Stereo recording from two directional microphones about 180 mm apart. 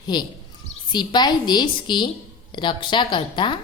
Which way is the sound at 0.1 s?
25° left (ahead or behind).